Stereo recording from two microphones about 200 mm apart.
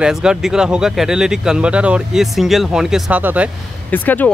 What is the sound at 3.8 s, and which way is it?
Speech, 10° left (ahead or behind).